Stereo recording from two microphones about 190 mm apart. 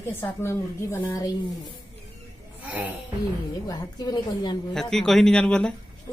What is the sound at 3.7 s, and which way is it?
Speech, 20° left (ahead or behind).